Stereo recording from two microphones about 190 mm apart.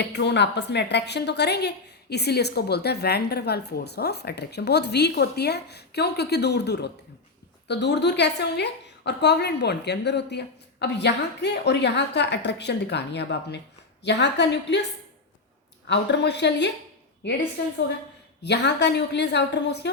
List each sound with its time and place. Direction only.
0.1 s a woman's voice: 65° left (ahead or behind)
15.9 s a woman's voice: 65° left (ahead or behind)
18.4 s a woman's voice: 65° left (ahead or behind)